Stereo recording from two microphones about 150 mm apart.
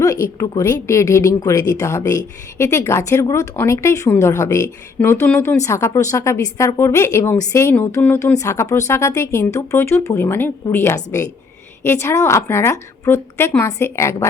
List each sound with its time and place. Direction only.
0.0 s a woman's voice: 20° left (ahead or behind)